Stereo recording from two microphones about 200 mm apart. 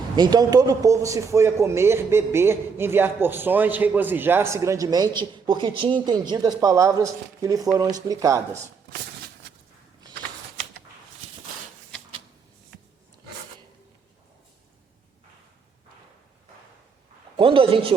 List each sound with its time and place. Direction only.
0.2 s a man's voice: 20° right (ahead or behind)
17.3 s speech: 25° right (ahead or behind)